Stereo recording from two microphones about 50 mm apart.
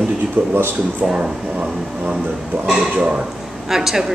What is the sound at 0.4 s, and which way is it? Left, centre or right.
Speech, right.